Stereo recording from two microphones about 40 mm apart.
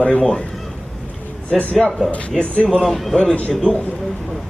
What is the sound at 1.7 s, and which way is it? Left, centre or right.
Speech, left.